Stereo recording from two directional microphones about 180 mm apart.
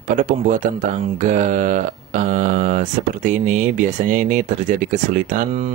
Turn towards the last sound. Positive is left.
turn(degrees=-45)  # may be behind; listen again after turning